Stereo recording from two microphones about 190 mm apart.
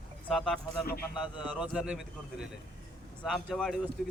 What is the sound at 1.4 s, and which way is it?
A man's voice, 5° right (ahead or behind).